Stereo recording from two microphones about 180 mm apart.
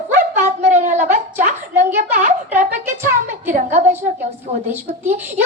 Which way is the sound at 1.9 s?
45° right (ahead or behind).